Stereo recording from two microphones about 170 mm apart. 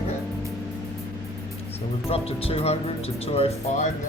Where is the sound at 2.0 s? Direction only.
35° left (ahead or behind).